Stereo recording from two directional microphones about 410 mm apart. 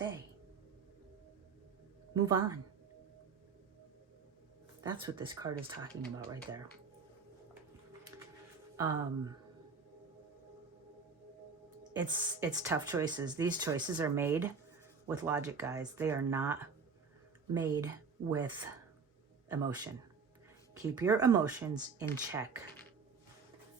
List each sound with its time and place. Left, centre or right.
2.2 s speech: centre
4.8 s speech: centre
8.7 s speech: centre
11.8 s speech: centre
19.5 s speech: centre